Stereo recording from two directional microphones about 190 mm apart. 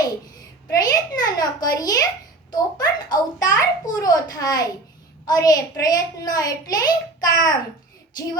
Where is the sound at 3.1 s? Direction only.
20° left (ahead or behind).